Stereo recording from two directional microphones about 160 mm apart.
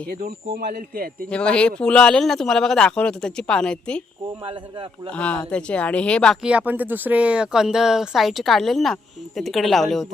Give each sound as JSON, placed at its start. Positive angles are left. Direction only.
{"t": 0.1, "sound": "a man's voice", "side_deg": -65}
{"t": 1.3, "sound": "speech", "side_deg": 5}
{"t": 5.0, "sound": "speech", "side_deg": 5}
{"t": 6.4, "sound": "speech", "side_deg": -10}